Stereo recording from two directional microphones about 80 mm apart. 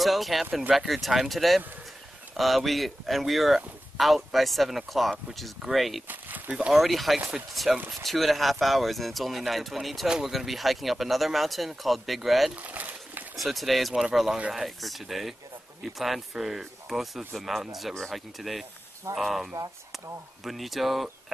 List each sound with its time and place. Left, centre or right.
0.0 s speech: centre
6.0 s speech: right
6.5 s speech: centre
12.5 s a sound: centre
13.4 s speech: centre